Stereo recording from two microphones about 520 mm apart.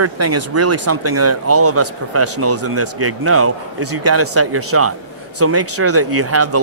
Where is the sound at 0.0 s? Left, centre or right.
Right.